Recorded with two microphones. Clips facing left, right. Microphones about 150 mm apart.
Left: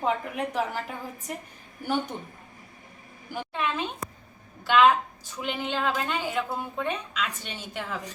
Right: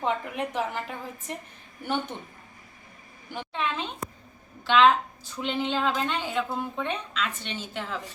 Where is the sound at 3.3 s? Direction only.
5° left (ahead or behind).